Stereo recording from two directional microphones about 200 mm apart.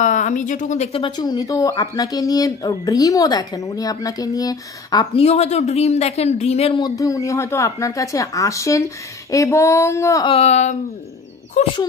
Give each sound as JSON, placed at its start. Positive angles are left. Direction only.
{"t": 0.0, "sound": "speech", "side_deg": 40}
{"t": 9.3, "sound": "female singing", "side_deg": 15}
{"t": 10.3, "sound": "speech", "side_deg": 35}